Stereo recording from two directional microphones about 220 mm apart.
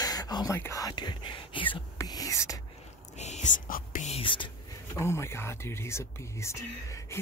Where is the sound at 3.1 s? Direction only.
30° left (ahead or behind).